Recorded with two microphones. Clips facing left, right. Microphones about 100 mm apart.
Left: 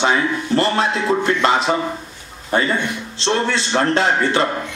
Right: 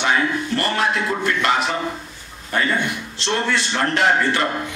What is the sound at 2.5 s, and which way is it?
A man's voice, 25° left (ahead or behind).